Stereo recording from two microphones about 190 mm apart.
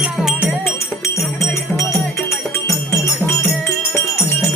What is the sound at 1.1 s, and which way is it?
Music, 15° left (ahead or behind).